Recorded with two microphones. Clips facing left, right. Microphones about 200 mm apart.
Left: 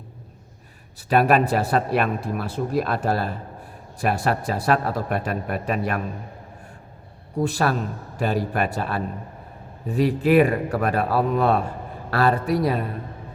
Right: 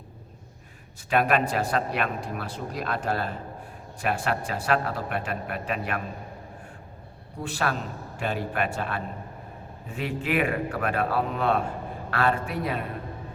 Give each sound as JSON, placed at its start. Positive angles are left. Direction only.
{"t": 1.1, "sound": "speech", "side_deg": 40}
{"t": 7.3, "sound": "speech", "side_deg": 40}